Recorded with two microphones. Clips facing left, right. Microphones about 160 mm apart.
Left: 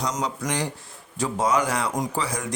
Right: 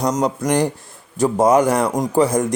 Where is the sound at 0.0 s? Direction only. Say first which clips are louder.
Right 8 dB; 50° right (ahead or behind).